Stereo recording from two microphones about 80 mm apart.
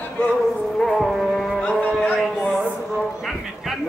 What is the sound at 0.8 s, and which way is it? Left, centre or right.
Music, centre.